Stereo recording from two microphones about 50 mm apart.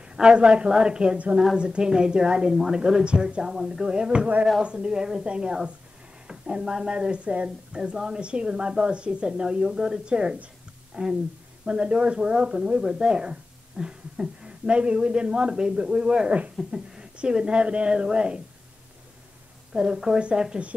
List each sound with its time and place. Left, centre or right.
0.0 s a woman's voice: centre
19.7 s a woman's voice: centre